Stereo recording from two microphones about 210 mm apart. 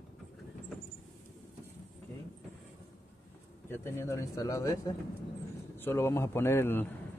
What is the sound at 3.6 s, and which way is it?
Speech, 10° left (ahead or behind).